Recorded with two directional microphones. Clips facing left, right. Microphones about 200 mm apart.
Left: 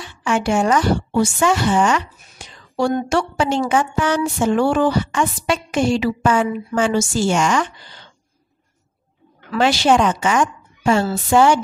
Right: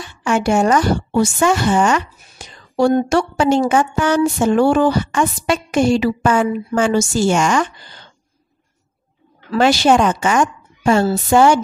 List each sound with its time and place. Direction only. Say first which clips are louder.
0.2 s a woman's voice: right 3 dB; 45° right (ahead or behind)
9.6 s a woman's voice: right 2 dB; 45° right (ahead or behind)